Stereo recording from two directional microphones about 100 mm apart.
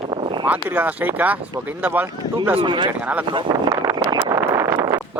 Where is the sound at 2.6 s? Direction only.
50° right (ahead or behind).